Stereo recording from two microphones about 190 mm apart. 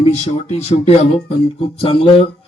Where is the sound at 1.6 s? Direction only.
30° left (ahead or behind).